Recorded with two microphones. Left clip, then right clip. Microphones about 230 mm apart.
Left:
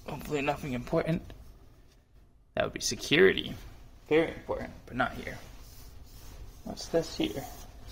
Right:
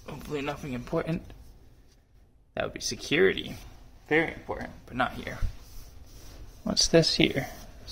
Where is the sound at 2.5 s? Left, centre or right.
Centre.